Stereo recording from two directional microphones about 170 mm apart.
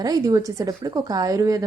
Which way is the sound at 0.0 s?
20° right (ahead or behind).